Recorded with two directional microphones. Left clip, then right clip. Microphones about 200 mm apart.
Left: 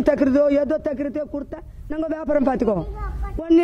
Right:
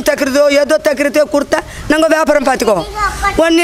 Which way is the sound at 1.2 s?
25° right (ahead or behind).